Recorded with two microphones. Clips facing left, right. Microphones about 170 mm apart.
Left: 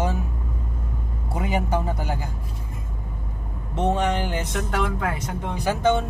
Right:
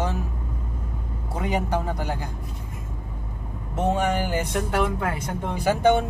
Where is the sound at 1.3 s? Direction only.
10° left (ahead or behind).